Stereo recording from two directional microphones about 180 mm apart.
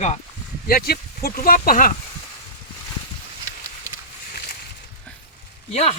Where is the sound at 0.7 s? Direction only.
55° left (ahead or behind).